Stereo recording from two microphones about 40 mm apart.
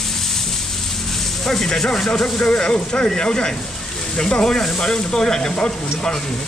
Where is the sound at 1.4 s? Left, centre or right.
Centre.